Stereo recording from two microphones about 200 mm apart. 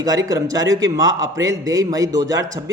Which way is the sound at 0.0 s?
20° right (ahead or behind).